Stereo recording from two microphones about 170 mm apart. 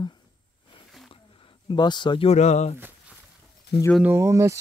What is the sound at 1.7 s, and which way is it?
Speech, 25° left (ahead or behind).